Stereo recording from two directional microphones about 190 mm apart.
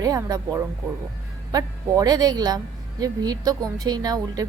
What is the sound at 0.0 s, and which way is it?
Speech, 20° right (ahead or behind).